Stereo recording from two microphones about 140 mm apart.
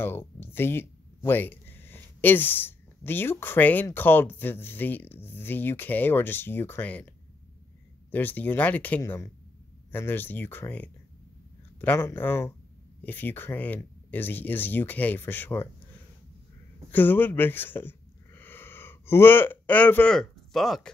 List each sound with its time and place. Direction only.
0.0 s speech: 15° left (ahead or behind)
8.1 s speech: 15° left (ahead or behind)
16.9 s speech: 15° left (ahead or behind)